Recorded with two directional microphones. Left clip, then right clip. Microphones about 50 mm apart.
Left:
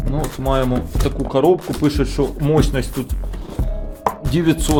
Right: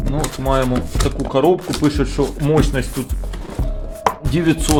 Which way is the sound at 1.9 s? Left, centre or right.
Left.